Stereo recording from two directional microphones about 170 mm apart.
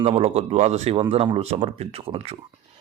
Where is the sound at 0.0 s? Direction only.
35° right (ahead or behind).